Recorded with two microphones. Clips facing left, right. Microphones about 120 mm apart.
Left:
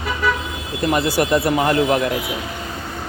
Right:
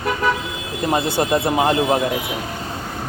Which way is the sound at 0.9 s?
25° right (ahead or behind).